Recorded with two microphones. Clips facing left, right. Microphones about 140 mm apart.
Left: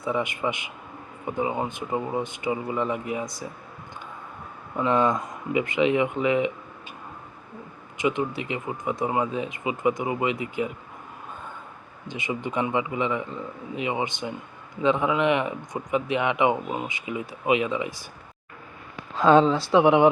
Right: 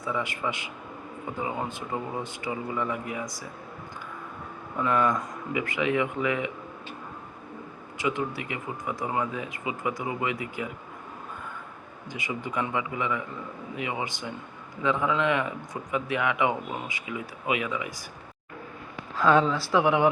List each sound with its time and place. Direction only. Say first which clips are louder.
0.0 s speech: left 4 dB; 20° left (ahead or behind)
4.8 s speech: left 3 dB; 25° left (ahead or behind)
7.9 s speech: left 4 dB; 20° left (ahead or behind)
12.0 s speech: left 4 dB; 25° left (ahead or behind)
19.1 s speech: left 4 dB; 25° left (ahead or behind)